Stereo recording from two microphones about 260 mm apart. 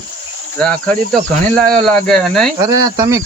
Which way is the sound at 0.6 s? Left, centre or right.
Centre.